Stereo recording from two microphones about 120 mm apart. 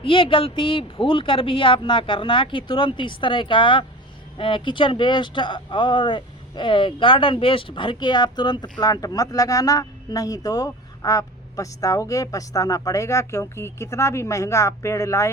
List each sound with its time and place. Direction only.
0.0 s speech: 45° left (ahead or behind); by 15.3 s 25° left (ahead or behind)